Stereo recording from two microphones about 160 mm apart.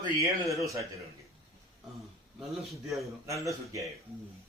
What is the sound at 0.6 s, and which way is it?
Speech, 20° right (ahead or behind).